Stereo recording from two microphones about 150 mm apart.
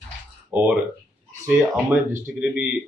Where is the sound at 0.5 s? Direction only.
10° right (ahead or behind).